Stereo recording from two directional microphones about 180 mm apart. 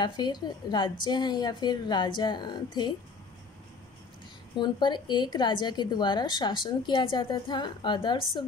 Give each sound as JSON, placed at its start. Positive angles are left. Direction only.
{"t": 0.0, "sound": "a woman's voice", "side_deg": 25}
{"t": 4.6, "sound": "a woman's voice", "side_deg": 25}